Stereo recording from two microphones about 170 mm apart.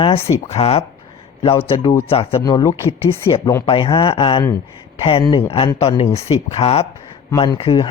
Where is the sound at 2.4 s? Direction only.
20° left (ahead or behind).